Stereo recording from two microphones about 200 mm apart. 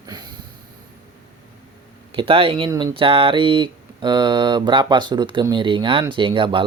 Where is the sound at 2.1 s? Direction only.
25° right (ahead or behind).